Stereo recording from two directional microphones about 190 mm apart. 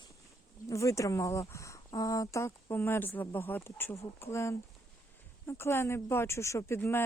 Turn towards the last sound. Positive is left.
turn(degrees=15)  # may be behind; listen again after turning